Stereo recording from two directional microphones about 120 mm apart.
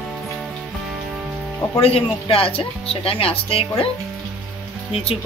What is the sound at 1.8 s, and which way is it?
Speech, 55° left (ahead or behind).